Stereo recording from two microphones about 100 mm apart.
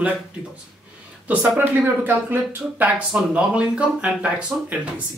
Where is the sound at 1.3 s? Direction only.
15° right (ahead or behind).